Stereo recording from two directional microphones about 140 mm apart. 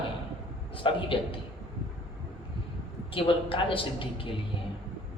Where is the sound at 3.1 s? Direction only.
40° left (ahead or behind).